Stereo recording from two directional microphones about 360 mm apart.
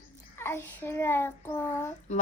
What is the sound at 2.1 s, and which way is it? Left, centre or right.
Speech, centre.